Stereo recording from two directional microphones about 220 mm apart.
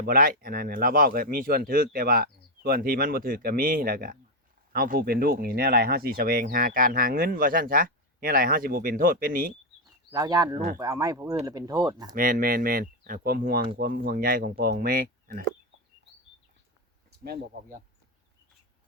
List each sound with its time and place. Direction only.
0.0 s speech: 40° right (ahead or behind)
10.1 s speech: 15° right (ahead or behind)
12.1 s speech: 40° right (ahead or behind)
17.1 s speech: 40° right (ahead or behind)